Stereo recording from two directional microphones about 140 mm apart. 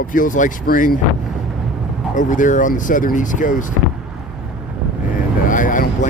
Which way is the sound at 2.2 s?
65° left (ahead or behind).